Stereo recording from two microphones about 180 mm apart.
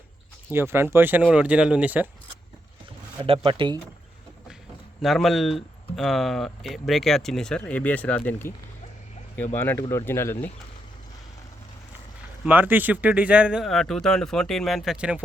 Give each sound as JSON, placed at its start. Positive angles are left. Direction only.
{"t": 0.5, "sound": "speech", "side_deg": -15}
{"t": 3.2, "sound": "speech", "side_deg": -30}
{"t": 5.0, "sound": "speech", "side_deg": 0}
{"t": 9.6, "sound": "speech", "side_deg": 10}
{"t": 12.5, "sound": "speech", "side_deg": -10}